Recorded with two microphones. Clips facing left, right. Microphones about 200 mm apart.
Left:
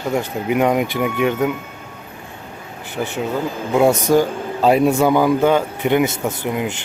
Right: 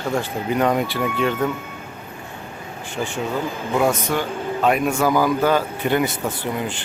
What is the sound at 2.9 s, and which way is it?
Speech, 20° left (ahead or behind).